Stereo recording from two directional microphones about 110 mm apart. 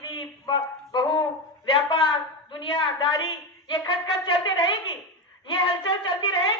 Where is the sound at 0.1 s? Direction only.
40° left (ahead or behind).